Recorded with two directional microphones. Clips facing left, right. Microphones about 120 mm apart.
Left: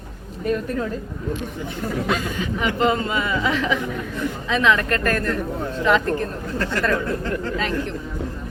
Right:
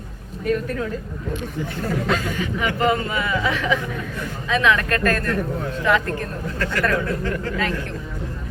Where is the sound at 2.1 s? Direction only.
20° left (ahead or behind).